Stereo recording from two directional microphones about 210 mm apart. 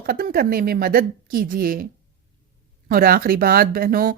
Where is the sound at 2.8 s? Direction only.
45° right (ahead or behind).